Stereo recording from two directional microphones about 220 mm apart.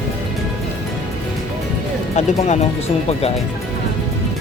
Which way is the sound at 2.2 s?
30° left (ahead or behind).